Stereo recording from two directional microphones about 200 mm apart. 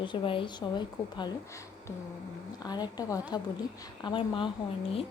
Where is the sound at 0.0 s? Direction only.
25° left (ahead or behind).